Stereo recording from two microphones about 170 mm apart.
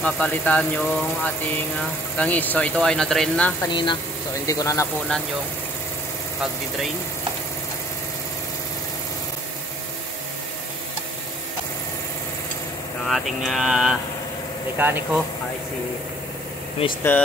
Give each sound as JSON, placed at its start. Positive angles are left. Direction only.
{"t": 0.0, "sound": "speech", "side_deg": 10}
{"t": 3.6, "sound": "speech", "side_deg": 25}
{"t": 13.0, "sound": "speech", "side_deg": 0}
{"t": 16.8, "sound": "speech", "side_deg": 35}